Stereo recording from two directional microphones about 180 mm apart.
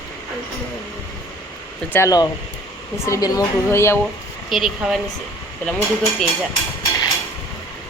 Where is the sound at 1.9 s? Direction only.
15° left (ahead or behind).